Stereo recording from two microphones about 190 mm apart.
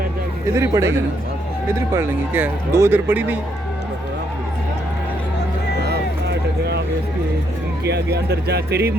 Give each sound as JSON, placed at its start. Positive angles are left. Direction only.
{"t": 0.5, "sound": "speech", "side_deg": -15}
{"t": 7.9, "sound": "speech", "side_deg": -60}